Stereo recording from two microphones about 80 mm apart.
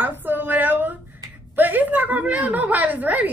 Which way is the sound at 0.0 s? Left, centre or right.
Right.